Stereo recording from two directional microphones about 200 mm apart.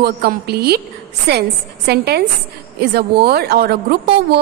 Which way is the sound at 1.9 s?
55° right (ahead or behind).